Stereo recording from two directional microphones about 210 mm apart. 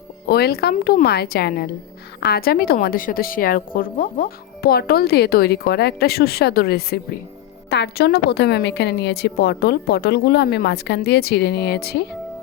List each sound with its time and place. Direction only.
0.3 s a woman's voice: 50° left (ahead or behind)